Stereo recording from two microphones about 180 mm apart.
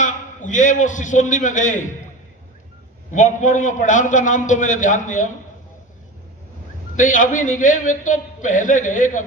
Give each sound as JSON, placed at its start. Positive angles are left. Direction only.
{"t": 0.0, "sound": "a man's voice", "side_deg": 45}
{"t": 3.1, "sound": "a man's voice", "side_deg": 45}
{"t": 6.9, "sound": "a man's voice", "side_deg": 45}